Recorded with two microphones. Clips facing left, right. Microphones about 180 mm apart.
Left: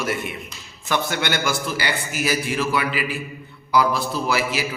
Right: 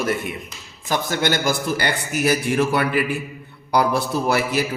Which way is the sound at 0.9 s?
45° right (ahead or behind).